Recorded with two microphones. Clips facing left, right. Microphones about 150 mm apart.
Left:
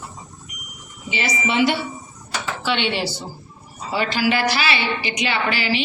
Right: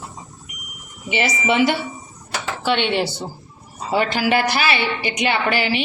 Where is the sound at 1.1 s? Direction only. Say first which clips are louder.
Right 3 dB; 60° right (ahead or behind).